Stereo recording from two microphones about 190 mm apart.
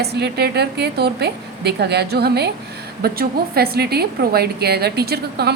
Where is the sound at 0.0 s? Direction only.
60° right (ahead or behind).